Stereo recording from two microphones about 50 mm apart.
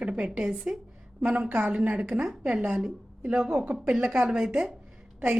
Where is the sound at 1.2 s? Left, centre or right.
Right.